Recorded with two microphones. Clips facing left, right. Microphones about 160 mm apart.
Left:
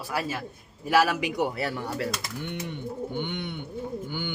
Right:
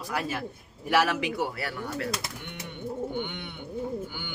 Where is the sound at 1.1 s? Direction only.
15° left (ahead or behind).